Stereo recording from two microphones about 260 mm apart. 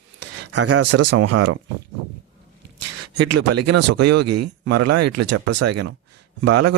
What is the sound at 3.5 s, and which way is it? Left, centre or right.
Speech, right.